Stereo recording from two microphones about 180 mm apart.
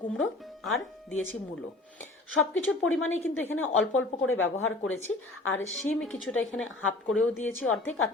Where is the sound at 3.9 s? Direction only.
90° left.